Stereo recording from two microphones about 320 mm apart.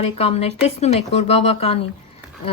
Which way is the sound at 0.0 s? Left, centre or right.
Centre.